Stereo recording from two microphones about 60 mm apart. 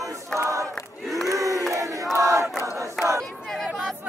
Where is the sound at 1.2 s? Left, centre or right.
Right.